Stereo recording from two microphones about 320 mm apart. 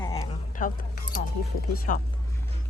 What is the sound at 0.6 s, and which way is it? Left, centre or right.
Speech, left.